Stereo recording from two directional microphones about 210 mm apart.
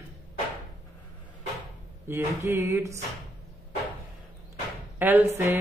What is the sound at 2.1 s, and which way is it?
Speech, 10° right (ahead or behind).